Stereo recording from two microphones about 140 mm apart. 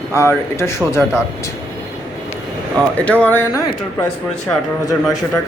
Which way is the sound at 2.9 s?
10° left (ahead or behind).